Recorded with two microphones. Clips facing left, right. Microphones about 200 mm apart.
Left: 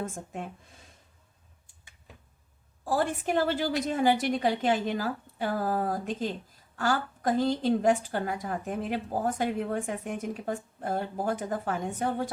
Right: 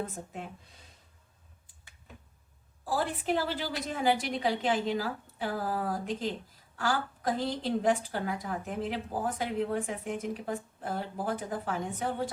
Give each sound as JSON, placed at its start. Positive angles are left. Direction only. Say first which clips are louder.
{"t": 2.8, "sound": "a woman's voice", "louder": "left 3 dB", "side_deg": 45}